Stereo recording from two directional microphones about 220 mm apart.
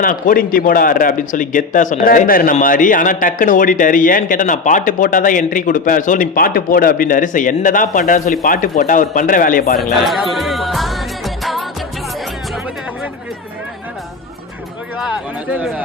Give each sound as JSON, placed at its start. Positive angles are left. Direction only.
{"t": 0.0, "sound": "speech", "side_deg": 40}
{"t": 10.1, "sound": "music", "side_deg": 0}
{"t": 15.5, "sound": "music", "side_deg": 0}